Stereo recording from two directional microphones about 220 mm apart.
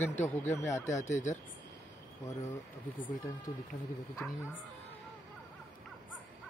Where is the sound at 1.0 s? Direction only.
30° left (ahead or behind).